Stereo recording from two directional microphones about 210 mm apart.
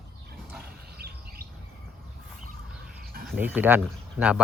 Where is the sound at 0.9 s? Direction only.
50° right (ahead or behind).